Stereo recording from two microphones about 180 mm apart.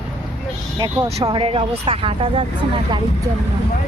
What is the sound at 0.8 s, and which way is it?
Speech, 25° right (ahead or behind).